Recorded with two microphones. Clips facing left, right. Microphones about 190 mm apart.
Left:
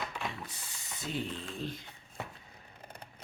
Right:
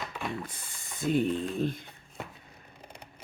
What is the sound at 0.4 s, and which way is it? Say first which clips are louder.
Speech: right 2 dB; 50° right (ahead or behind).